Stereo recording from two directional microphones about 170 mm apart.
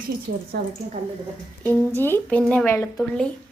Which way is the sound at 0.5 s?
70° right (ahead or behind).